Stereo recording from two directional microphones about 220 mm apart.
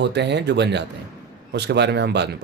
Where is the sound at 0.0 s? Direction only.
50° right (ahead or behind).